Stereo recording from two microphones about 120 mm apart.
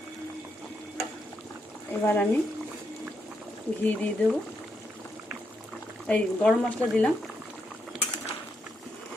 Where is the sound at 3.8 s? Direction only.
10° left (ahead or behind).